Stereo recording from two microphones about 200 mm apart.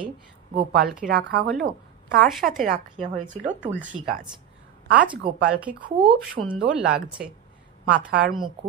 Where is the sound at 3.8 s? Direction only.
5° right (ahead or behind).